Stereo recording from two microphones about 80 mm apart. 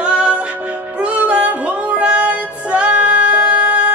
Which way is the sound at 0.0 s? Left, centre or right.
Centre.